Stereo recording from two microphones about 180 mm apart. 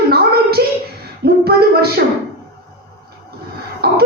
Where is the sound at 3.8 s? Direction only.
60° right (ahead or behind).